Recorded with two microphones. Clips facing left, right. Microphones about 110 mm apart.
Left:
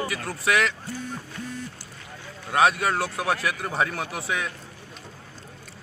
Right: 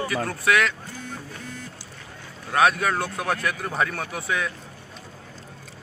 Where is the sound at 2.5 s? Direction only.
5° left (ahead or behind).